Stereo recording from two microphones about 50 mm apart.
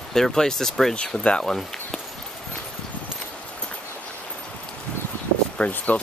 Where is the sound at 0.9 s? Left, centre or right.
Left.